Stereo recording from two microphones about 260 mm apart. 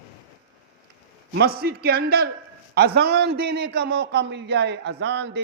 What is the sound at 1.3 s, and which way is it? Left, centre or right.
A man's voice, right.